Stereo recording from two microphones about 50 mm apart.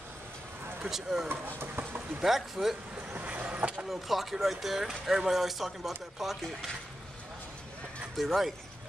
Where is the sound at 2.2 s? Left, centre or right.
Centre.